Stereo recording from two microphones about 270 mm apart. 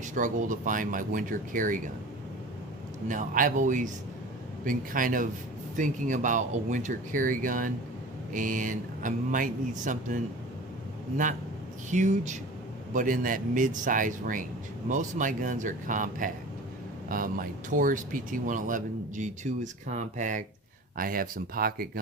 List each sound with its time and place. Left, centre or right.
0.0 s speech: right
3.1 s speech: right
11.9 s speech: right